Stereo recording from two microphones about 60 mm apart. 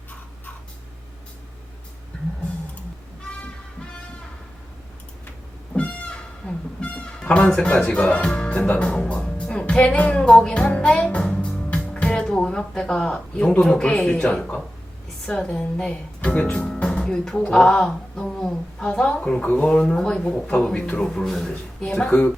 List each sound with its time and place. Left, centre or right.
5.7 s music: centre
6.7 s speech: centre
10.8 s music: centre
15.3 s speech: centre
16.6 s music: centre
17.5 s a sound: centre
19.4 s speech: left